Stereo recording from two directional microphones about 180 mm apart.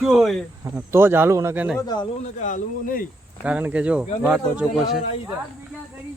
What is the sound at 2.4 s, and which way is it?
Speech, 45° left (ahead or behind).